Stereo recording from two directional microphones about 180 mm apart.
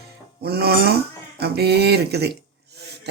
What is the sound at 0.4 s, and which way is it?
Speech, 60° right (ahead or behind).